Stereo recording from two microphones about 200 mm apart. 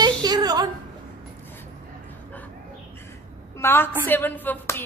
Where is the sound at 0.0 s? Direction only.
20° right (ahead or behind).